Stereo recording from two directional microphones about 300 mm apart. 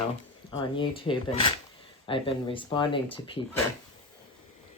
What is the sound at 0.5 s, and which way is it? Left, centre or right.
Speech, centre.